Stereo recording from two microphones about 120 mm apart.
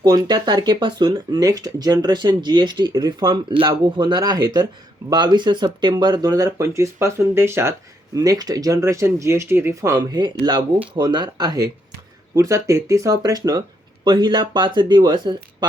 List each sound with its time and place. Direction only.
0.0 s speech: 40° right (ahead or behind)